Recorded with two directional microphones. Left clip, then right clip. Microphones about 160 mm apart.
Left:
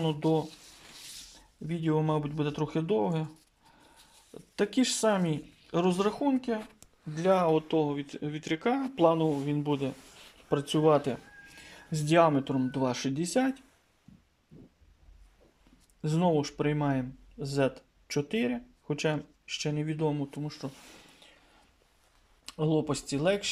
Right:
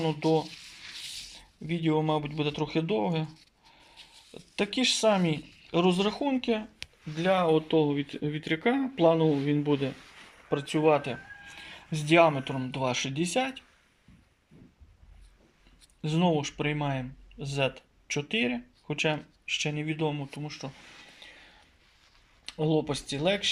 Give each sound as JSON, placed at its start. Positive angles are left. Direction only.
{"t": 0.0, "sound": "speech", "side_deg": 10}
{"t": 1.6, "sound": "speech", "side_deg": 5}
{"t": 4.4, "sound": "speech", "side_deg": 5}
{"t": 16.0, "sound": "speech", "side_deg": 5}
{"t": 22.4, "sound": "speech", "side_deg": 5}